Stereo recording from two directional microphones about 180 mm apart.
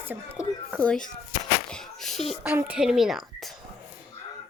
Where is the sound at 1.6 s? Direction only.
5° left (ahead or behind).